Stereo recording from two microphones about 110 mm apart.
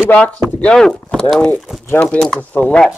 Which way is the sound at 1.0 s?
15° left (ahead or behind).